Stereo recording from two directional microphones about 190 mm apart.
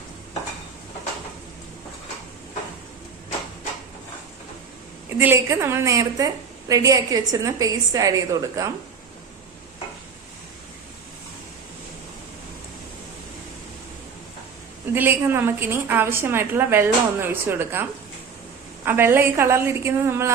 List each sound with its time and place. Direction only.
5.0 s a woman's voice: 10° right (ahead or behind)
14.9 s a woman's voice: 10° right (ahead or behind)
18.9 s a woman's voice: 10° right (ahead or behind)